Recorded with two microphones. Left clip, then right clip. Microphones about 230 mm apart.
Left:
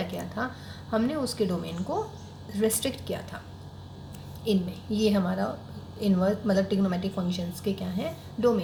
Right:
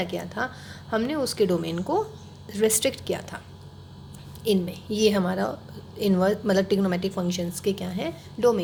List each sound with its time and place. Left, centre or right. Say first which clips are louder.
0.0 s a woman's voice: right 4 dB; right
4.4 s a woman's voice: right 4 dB; right